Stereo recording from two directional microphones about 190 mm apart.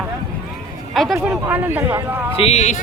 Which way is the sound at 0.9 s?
Centre (ahead or behind).